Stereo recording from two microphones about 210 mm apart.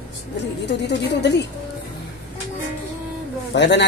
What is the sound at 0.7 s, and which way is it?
Speech, 55° left (ahead or behind).